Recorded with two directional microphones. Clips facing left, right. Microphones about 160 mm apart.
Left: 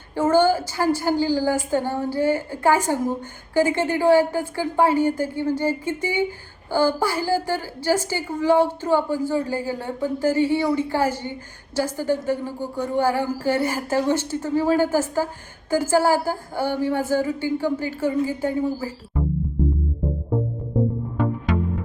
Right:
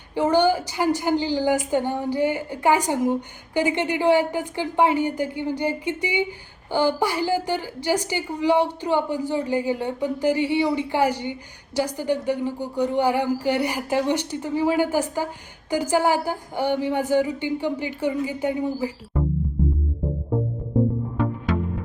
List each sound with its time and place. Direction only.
0.1 s a woman's voice: 15° right (ahead or behind)